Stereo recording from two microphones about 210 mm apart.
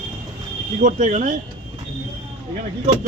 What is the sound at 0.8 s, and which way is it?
Speech, 35° right (ahead or behind).